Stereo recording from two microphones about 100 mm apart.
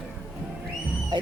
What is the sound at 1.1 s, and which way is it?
Music, 50° right (ahead or behind).